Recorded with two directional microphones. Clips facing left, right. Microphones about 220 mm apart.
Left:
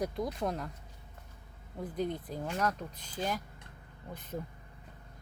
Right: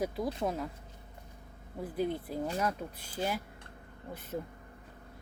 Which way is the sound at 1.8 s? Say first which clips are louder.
Right 2 dB; 10° right (ahead or behind).